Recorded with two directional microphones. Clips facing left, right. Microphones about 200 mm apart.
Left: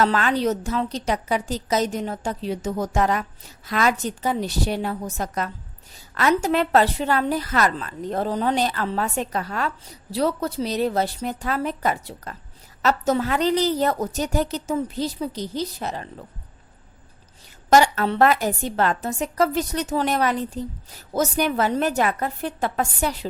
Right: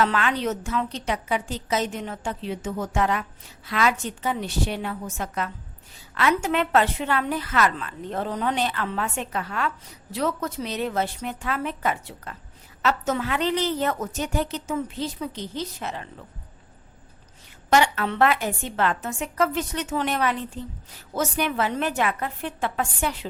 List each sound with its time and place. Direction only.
0.0 s a woman's voice: 35° left (ahead or behind)
17.7 s a woman's voice: 40° left (ahead or behind)